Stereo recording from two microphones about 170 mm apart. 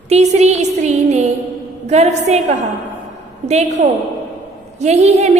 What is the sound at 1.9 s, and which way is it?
A woman's voice, 40° right (ahead or behind).